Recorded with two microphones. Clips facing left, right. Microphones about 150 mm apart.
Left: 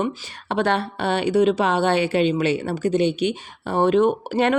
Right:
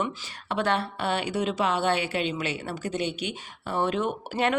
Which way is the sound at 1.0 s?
25° left (ahead or behind).